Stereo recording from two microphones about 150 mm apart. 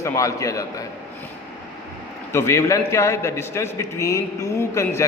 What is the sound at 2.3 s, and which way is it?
A man's voice, 20° left (ahead or behind).